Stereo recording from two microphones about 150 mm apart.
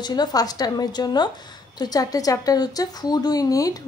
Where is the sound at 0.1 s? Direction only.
25° left (ahead or behind).